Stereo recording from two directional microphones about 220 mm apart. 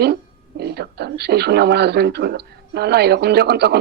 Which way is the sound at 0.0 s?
50° right (ahead or behind).